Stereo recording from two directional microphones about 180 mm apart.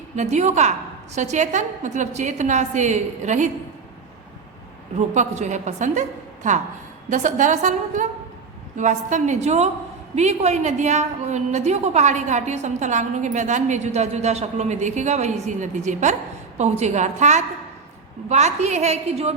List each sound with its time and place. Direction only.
0.2 s a woman's voice: 40° right (ahead or behind)
4.9 s a woman's voice: 40° right (ahead or behind)